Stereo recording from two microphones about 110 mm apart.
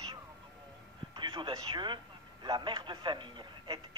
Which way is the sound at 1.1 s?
50° right (ahead or behind).